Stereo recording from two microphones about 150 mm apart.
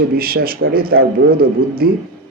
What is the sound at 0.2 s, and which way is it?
A man's voice, 90° right.